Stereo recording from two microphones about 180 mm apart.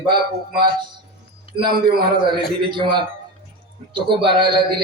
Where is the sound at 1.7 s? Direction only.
60° right (ahead or behind).